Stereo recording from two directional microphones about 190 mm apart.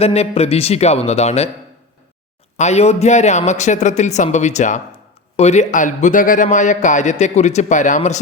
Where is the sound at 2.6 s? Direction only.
35° left (ahead or behind).